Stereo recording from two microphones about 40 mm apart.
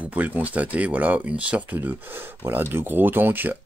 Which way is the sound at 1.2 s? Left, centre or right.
Right.